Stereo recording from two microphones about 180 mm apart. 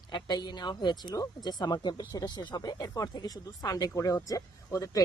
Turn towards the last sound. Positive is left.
turn(degrees=20)  # may be behind; listen again after turning